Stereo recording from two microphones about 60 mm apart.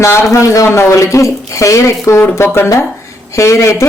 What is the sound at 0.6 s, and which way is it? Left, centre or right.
Speech, left.